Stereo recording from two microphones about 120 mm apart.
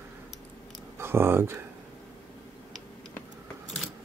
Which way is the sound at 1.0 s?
20° right (ahead or behind).